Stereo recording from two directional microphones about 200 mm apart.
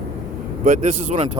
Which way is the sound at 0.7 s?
35° right (ahead or behind).